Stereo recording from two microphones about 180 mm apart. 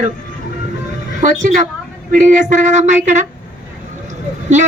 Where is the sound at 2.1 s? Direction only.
45° right (ahead or behind).